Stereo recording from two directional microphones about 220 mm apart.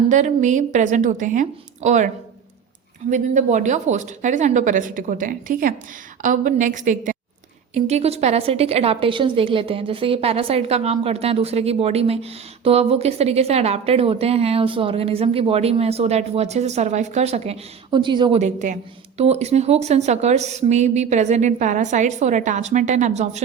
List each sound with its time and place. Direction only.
0.1 s speech: 35° right (ahead or behind)
3.1 s a woman's voice: 35° right (ahead or behind)
18.3 s speech: 35° right (ahead or behind)